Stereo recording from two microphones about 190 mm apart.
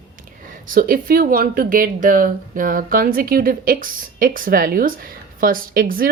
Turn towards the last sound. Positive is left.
turn(degrees=-50)  # may be behind; listen again after turning